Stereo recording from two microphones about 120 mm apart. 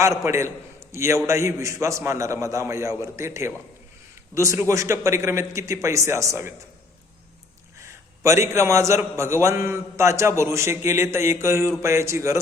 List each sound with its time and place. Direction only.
0.3 s a man's voice: 25° right (ahead or behind)
7.8 s a man's voice: 25° right (ahead or behind)